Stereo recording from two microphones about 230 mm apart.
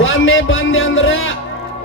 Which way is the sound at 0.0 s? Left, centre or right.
Left.